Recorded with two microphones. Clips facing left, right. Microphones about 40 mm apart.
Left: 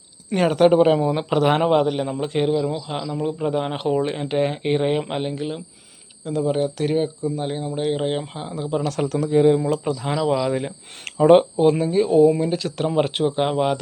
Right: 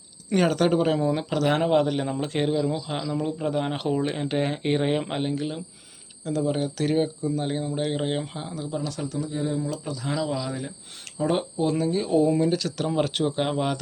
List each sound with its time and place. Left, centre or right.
0.3 s speech: centre
1.8 s a man's voice: centre
8.6 s speech: left
9.6 s speech: left
11.9 s a man's voice: centre